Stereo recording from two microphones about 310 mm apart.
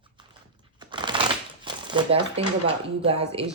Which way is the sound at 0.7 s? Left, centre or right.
Centre.